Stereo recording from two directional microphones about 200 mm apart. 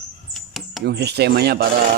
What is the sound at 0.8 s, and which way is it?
Speech, 55° right (ahead or behind).